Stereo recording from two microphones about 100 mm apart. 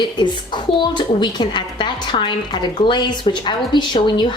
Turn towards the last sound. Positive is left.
turn(degrees=50)  # may be behind; listen again after turning